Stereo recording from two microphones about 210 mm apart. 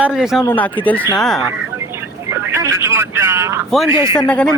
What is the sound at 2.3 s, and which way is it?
Speech, 10° right (ahead or behind).